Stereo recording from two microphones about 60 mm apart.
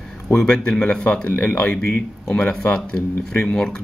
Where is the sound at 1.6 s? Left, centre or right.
Centre.